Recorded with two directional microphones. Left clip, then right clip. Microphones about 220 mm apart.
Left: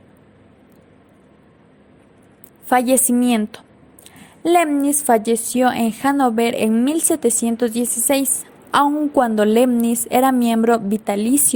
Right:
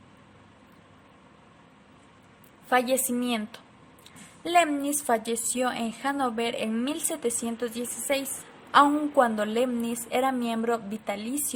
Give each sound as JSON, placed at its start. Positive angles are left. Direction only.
{"t": 2.6, "sound": "a woman's voice", "side_deg": 30}